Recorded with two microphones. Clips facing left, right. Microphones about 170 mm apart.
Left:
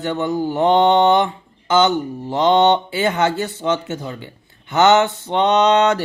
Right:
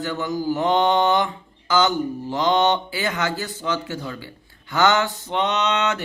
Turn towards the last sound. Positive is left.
turn(degrees=35)  # may be behind; listen again after turning